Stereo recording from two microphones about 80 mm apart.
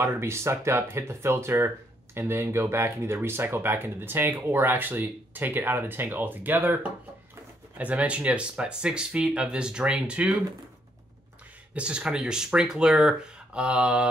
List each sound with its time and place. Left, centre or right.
0.0 s speech: right; by 10.3 s centre
11.7 s speech: centre